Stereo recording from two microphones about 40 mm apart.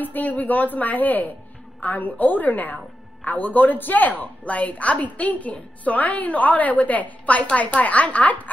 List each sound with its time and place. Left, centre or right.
0.0 s a woman's voice: left